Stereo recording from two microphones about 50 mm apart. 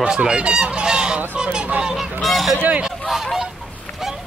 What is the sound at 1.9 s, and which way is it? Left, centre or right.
Speech, centre.